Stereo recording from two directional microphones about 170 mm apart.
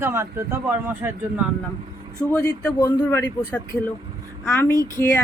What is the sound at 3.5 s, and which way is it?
Speech, 10° left (ahead or behind).